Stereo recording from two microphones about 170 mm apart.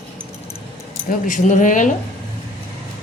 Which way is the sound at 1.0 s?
50° left (ahead or behind).